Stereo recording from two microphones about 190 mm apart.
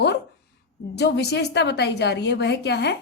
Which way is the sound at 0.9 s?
65° left (ahead or behind).